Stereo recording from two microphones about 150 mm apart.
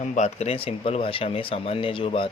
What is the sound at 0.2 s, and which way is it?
Speech, 45° left (ahead or behind).